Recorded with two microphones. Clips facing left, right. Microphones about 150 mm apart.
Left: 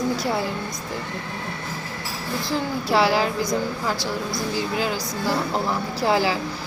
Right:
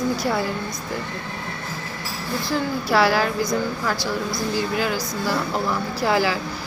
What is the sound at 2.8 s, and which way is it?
Speech, 20° left (ahead or behind).